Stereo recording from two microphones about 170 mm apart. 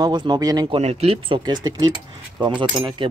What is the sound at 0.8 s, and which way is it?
Speech, 35° right (ahead or behind).